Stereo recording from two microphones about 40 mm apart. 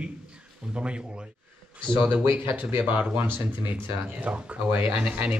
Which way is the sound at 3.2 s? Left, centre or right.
Right.